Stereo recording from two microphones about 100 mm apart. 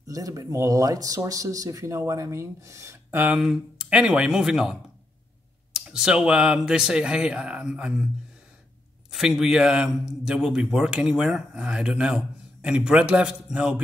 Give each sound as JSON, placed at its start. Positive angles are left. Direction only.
{"t": 0.0, "sound": "speech", "side_deg": -35}
{"t": 3.2, "sound": "a man's voice", "side_deg": -10}
{"t": 9.1, "sound": "a man's voice", "side_deg": -5}